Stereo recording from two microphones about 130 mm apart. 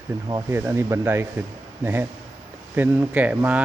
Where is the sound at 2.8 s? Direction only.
10° right (ahead or behind).